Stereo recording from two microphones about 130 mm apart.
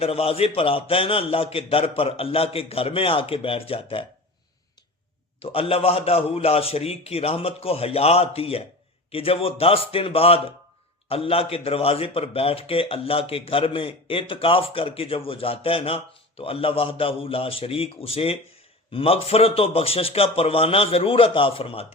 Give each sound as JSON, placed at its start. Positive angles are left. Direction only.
{"t": 0.0, "sound": "a man's voice", "side_deg": 50}
{"t": 5.4, "sound": "a man's voice", "side_deg": 45}